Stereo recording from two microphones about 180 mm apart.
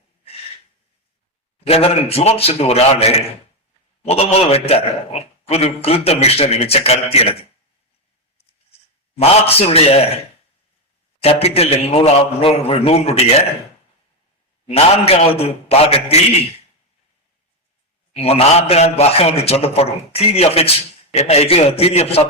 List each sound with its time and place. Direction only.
1.6 s a man's voice: 35° left (ahead or behind)
9.1 s a man's voice: 35° left (ahead or behind)
11.2 s a man's voice: 35° left (ahead or behind)
14.7 s a man's voice: 35° left (ahead or behind)
18.1 s a man's voice: 35° left (ahead or behind)